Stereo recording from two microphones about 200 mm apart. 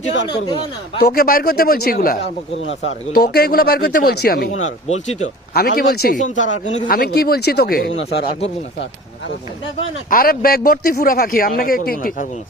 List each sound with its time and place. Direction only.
0.3 s speech: 20° left (ahead or behind)
0.9 s a man's voice: 50° left (ahead or behind)
2.6 s speech: 70° left (ahead or behind)
3.1 s a man's voice: 50° left (ahead or behind)
4.5 s speech: 35° left (ahead or behind)
5.5 s a man's voice: 55° left (ahead or behind)
6.3 s speech: 70° left (ahead or behind)
6.7 s a man's voice: 40° left (ahead or behind)
10.1 s a man's voice: 45° left (ahead or behind)